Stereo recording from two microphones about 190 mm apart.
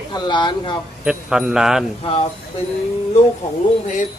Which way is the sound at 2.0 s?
35° left (ahead or behind).